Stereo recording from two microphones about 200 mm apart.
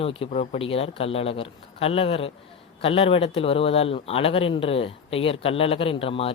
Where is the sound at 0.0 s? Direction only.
30° left (ahead or behind).